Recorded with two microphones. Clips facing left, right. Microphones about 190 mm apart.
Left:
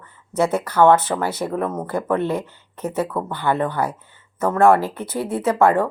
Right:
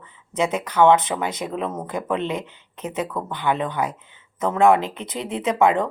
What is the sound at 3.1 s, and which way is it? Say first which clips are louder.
Speech: left 3 dB; 5° left (ahead or behind).